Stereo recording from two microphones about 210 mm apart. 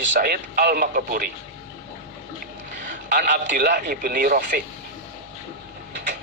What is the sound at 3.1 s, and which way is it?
Speech, 40° right (ahead or behind).